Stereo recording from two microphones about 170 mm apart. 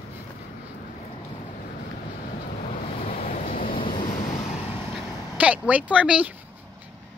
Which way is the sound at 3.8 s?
30° left (ahead or behind).